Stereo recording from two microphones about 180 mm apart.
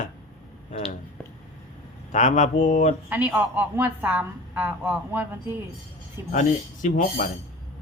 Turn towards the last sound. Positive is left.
turn(degrees=50)  # may be behind; listen again after turning